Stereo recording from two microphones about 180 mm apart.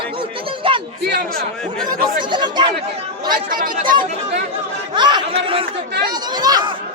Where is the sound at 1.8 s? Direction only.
25° right (ahead or behind).